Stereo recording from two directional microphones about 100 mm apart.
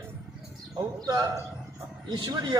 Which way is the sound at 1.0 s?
35° right (ahead or behind).